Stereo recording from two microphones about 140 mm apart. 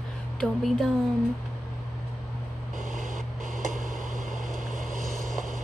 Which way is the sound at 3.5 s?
65° right (ahead or behind).